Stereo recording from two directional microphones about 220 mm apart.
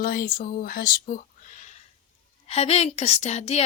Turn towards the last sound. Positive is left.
turn(degrees=30)  # may be behind; listen again after turning